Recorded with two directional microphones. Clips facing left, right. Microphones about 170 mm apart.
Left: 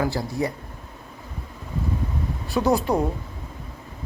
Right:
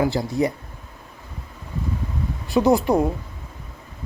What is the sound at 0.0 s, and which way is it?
Speech, 20° right (ahead or behind).